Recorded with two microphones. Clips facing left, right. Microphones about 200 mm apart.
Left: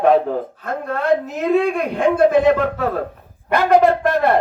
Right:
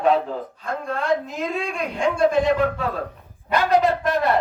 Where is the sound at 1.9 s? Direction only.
60° left (ahead or behind).